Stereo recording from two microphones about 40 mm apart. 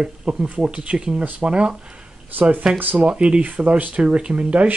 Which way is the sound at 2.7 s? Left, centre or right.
Right.